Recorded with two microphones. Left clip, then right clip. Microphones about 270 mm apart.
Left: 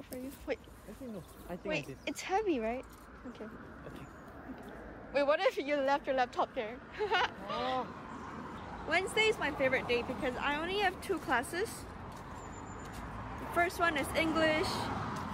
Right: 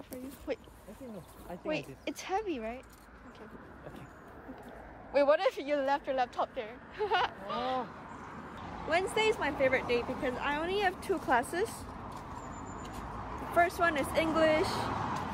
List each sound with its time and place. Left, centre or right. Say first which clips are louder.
0.5 s speech: right 1 dB; centre
1.7 s speech: right 1 dB; centre
5.1 s speech: right 3 dB; centre
8.8 s speech: right 1 dB; centre
13.6 s speech: right 3 dB; centre